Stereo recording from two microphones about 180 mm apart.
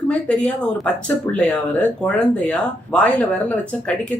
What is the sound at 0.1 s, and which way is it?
Speech, 5° left (ahead or behind).